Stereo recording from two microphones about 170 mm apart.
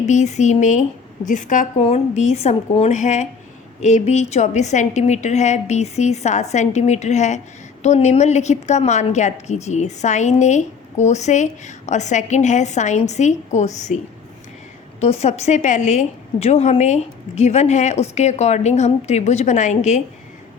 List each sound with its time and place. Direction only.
0.0 s a woman's voice: 45° left (ahead or behind)
15.0 s a woman's voice: 40° left (ahead or behind)